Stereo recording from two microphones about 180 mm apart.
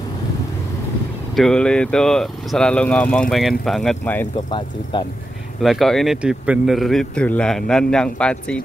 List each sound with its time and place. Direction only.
1.3 s a man's voice: 5° left (ahead or behind)
4.5 s speech: 25° left (ahead or behind)
5.6 s a man's voice: centre (ahead or behind)